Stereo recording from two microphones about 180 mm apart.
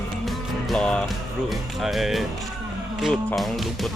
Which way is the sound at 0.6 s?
5° left (ahead or behind).